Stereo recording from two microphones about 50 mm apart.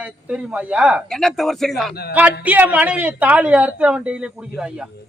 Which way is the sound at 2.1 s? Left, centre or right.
Right.